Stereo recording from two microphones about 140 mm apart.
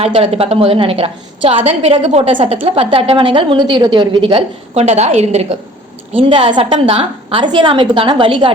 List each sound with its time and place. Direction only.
0.0 s a woman's voice: 45° right (ahead or behind)
6.1 s a woman's voice: 35° right (ahead or behind)